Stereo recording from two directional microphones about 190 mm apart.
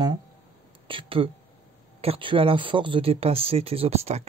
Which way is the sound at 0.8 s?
30° right (ahead or behind).